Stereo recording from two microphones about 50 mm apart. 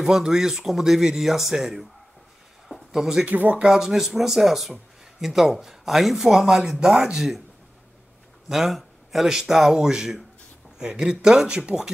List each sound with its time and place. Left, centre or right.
0.0 s speech: centre
2.7 s a sound: centre
3.3 s speech: right
3.5 s speech: centre
8.5 s speech: centre